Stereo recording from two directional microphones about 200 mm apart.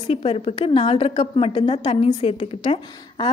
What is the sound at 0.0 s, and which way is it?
A woman's voice, 30° left (ahead or behind).